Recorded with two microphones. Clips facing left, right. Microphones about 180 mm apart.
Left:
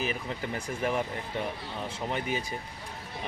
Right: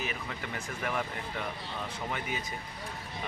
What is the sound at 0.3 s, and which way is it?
Speech, 30° left (ahead or behind).